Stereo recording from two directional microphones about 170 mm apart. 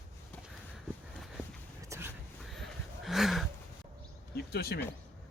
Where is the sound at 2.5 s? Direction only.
Centre (ahead or behind).